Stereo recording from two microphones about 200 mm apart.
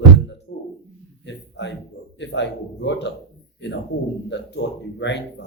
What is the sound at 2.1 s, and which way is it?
Speech, 60° left (ahead or behind).